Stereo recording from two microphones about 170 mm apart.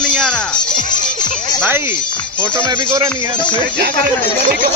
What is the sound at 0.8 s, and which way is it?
Music, 50° left (ahead or behind).